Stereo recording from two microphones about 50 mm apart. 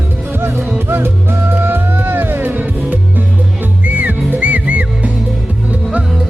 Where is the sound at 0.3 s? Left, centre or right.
Right.